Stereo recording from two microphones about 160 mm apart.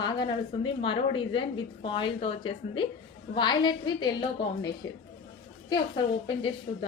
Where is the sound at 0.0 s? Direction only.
30° left (ahead or behind).